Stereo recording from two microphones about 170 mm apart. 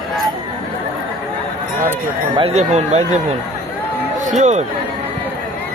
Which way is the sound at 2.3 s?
35° right (ahead or behind).